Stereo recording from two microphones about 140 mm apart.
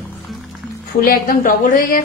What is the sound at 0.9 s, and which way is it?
Speech, 90° left.